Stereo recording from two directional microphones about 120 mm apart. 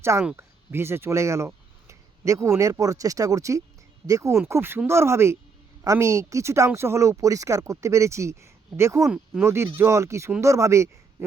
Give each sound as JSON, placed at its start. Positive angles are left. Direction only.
{"t": 0.3, "sound": "speech", "side_deg": -20}
{"t": 9.0, "sound": "speech", "side_deg": -5}
{"t": 9.4, "sound": "a man's voice", "side_deg": -20}